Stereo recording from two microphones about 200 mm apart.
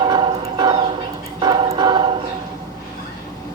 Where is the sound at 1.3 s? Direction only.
20° right (ahead or behind).